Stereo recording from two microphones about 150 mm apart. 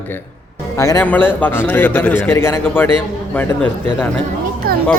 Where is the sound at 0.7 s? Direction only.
20° left (ahead or behind).